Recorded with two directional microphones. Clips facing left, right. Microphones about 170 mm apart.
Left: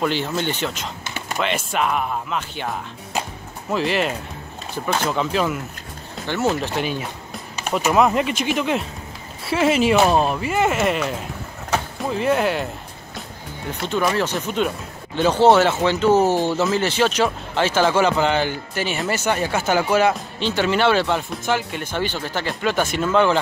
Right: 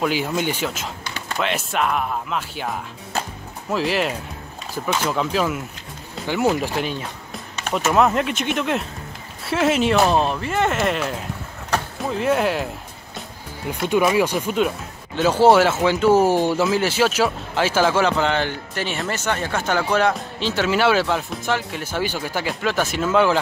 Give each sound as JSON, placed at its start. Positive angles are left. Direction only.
{"t": 0.0, "sound": "speech", "side_deg": -10}
{"t": 1.0, "sound": "a sound", "side_deg": 20}
{"t": 1.4, "sound": "speech", "side_deg": 0}
{"t": 6.8, "sound": "speech", "side_deg": 5}
{"t": 13.7, "sound": "speech", "side_deg": -10}